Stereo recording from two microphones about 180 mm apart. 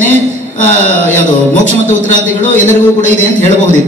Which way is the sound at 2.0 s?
45° left (ahead or behind).